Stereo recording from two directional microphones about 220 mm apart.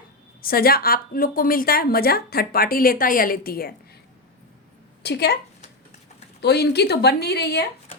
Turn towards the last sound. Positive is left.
turn(degrees=50)  # may be behind; listen again after turning